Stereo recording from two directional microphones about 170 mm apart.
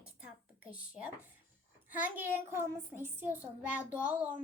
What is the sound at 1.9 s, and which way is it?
A child's voice, 10° right (ahead or behind).